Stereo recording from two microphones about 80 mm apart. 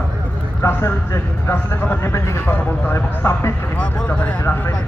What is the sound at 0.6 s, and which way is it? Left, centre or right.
Speech, left.